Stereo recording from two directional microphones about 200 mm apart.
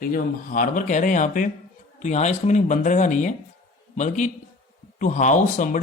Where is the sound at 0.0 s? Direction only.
45° left (ahead or behind).